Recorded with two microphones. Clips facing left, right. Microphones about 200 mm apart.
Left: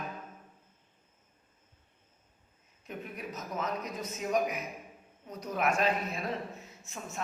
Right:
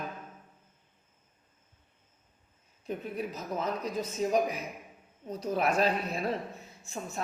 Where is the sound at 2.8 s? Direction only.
30° right (ahead or behind).